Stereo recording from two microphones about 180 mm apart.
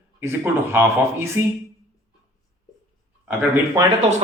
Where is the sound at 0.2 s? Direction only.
15° right (ahead or behind).